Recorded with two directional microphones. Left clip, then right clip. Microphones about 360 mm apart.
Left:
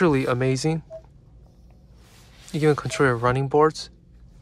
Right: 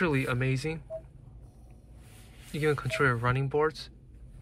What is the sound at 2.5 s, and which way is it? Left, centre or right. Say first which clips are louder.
Speech: left 7 dB; centre.